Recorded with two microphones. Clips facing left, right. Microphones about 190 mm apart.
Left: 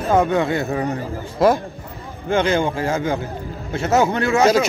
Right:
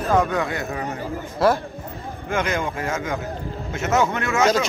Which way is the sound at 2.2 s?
30° left (ahead or behind).